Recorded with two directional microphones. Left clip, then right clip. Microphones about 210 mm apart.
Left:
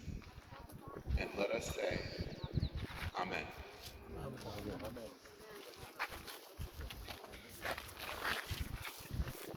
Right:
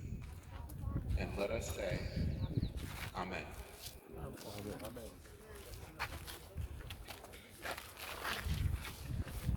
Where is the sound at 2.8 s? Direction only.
45° right (ahead or behind).